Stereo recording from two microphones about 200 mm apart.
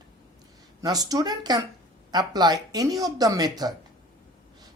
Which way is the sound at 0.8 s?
20° right (ahead or behind).